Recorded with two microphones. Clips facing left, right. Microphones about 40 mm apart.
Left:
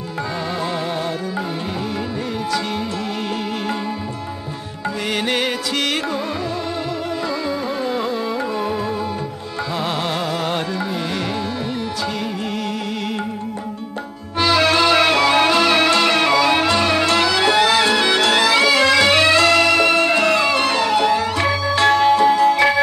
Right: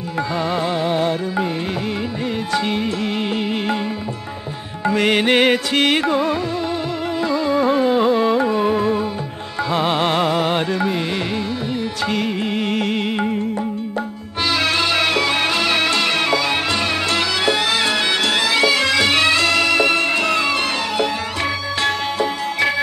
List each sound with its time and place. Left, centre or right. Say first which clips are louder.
0.7 s music: right 4 dB; right
2.7 s music: right 3 dB; right
5.1 s music: right 5 dB; right
7.2 s carnatic music: right 9 dB; right
9.7 s music: right 5 dB; right
10.3 s music: right 3 dB; right
12.4 s music: right 3 dB; right
12.7 s music: right 5 dB; right
13.0 s music: right 3 dB; right
14.4 s music: left 4 dB; centre
17.0 s music: left 3 dB; centre
21.4 s music: left 4 dB; centre